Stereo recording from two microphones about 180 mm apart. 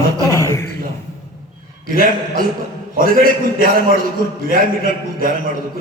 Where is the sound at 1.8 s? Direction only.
50° right (ahead or behind).